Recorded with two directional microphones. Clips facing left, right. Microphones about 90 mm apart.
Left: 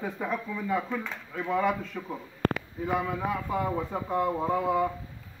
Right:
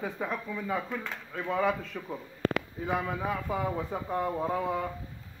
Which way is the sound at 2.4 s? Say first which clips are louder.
Left 1 dB; 50° left (ahead or behind).